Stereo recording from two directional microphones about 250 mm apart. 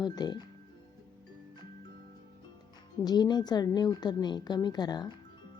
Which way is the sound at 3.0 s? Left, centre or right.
Centre.